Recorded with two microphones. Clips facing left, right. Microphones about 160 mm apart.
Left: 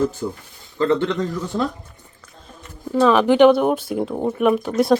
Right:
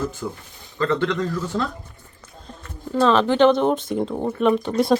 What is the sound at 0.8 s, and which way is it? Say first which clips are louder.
Speech: left 3 dB; 25° left (ahead or behind).